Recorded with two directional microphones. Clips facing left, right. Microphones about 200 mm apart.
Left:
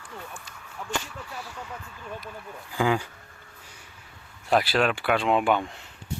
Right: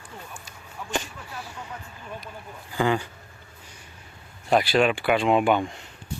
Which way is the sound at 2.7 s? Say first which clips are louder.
Right 1 dB; 5° left (ahead or behind).